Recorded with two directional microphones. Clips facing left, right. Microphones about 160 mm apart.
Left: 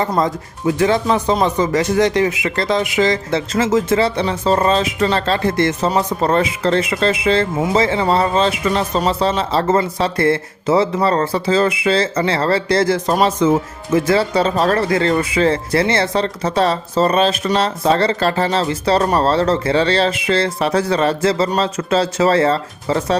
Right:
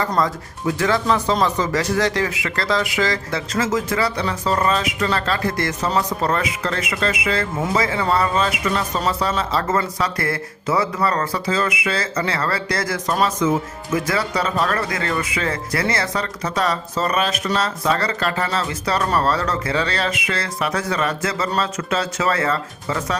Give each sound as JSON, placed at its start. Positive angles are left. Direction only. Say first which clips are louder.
{"t": 0.2, "sound": "speech", "louder": "left 3 dB", "side_deg": 20}